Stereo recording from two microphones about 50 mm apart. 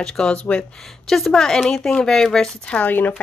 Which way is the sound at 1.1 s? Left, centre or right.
Centre.